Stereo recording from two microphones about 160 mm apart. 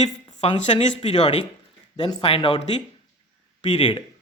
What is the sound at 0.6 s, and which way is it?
Speech, 35° left (ahead or behind).